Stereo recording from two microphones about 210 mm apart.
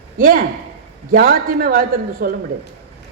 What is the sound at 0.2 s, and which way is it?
A man's voice, 40° right (ahead or behind).